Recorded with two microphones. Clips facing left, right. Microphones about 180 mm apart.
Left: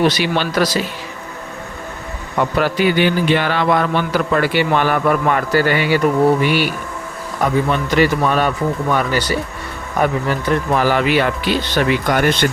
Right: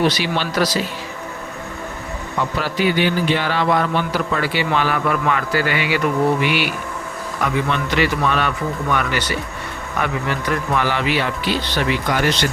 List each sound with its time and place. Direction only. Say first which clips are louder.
0.1 s speech: left 3 dB; 55° left (ahead or behind)
2.6 s a man's voice: left 3 dB; 55° left (ahead or behind); by 9.4 s 35° left (ahead or behind)
10.4 s speech: left 5 dB; 35° left (ahead or behind); by 12.5 s 55° left (ahead or behind)